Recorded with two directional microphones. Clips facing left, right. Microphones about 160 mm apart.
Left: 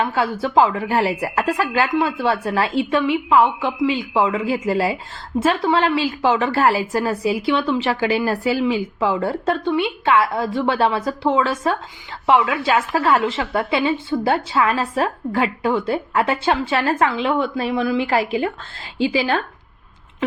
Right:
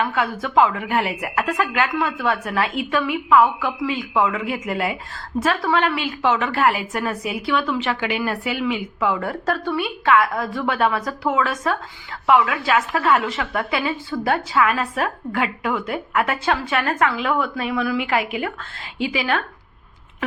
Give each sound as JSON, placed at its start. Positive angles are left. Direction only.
{"t": 0.0, "sound": "a woman's voice", "side_deg": 30}